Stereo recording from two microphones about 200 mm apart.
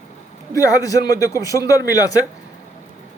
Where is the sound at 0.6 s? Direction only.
15° left (ahead or behind).